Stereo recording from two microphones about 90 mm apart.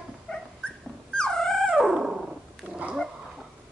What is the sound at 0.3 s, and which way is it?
Dog, 15° left (ahead or behind).